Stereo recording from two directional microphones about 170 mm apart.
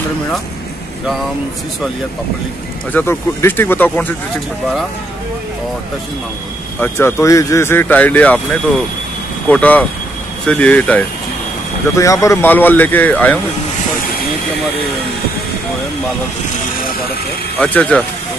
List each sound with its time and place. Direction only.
2.9 s speech: 10° left (ahead or behind)
6.8 s speech: 15° left (ahead or behind)
9.5 s speech: 10° left (ahead or behind)
12.0 s speech: 20° left (ahead or behind)
17.6 s speech: 10° left (ahead or behind)